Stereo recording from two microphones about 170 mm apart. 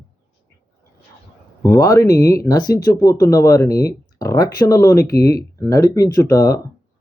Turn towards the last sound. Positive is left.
turn(degrees=20)  # may be behind; listen again after turning